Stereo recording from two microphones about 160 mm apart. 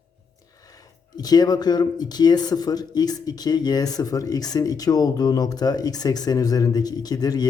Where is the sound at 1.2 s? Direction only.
25° left (ahead or behind).